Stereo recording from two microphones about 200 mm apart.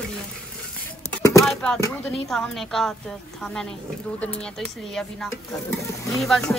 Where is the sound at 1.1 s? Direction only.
15° left (ahead or behind).